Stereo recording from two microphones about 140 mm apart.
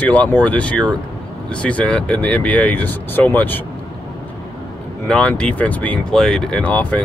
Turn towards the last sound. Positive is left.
turn(degrees=10)  # may be behind; listen again after turning